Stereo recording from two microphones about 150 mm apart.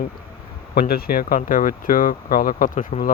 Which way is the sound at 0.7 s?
90° left.